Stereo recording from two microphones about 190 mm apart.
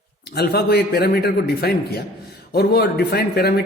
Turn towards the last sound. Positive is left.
turn(degrees=55)  # may be behind; listen again after turning